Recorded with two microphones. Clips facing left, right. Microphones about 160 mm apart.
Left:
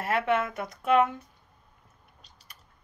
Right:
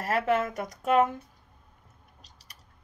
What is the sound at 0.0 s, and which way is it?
Speech, 40° right (ahead or behind).